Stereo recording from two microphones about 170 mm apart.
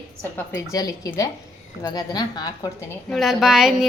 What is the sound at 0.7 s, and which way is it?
A woman's voice, 20° left (ahead or behind).